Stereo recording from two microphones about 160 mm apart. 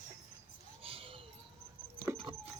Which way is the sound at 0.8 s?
35° right (ahead or behind).